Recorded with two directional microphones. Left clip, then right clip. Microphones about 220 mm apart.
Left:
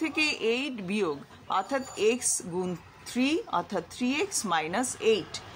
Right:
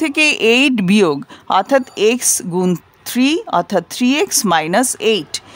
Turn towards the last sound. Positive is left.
turn(degrees=-50)  # may be behind; listen again after turning